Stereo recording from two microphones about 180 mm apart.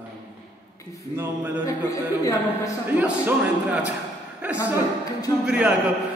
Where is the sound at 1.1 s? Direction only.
10° right (ahead or behind).